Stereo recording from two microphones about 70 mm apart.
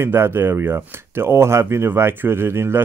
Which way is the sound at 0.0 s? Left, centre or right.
Right.